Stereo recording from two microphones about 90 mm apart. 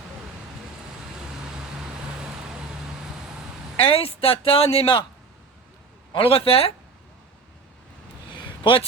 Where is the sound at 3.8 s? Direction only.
90° left.